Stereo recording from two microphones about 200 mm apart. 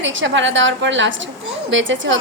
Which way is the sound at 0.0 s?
65° right (ahead or behind).